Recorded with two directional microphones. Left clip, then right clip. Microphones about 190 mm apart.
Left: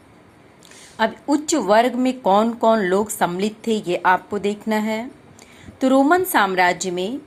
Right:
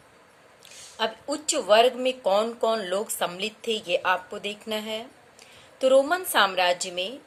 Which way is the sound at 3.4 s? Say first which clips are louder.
Left 6 dB; 50° left (ahead or behind).